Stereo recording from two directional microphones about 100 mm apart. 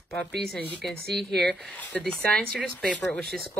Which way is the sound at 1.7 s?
15° left (ahead or behind).